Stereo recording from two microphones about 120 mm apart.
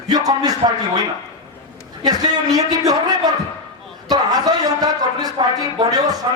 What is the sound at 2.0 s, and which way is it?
A man's voice, 35° right (ahead or behind).